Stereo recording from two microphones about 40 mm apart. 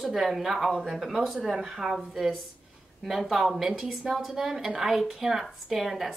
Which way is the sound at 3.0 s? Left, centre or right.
Centre.